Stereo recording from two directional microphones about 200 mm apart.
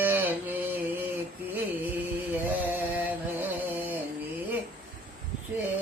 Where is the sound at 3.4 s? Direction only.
10° right (ahead or behind).